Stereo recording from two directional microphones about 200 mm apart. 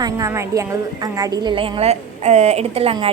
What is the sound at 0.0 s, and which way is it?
A woman's voice, 15° right (ahead or behind).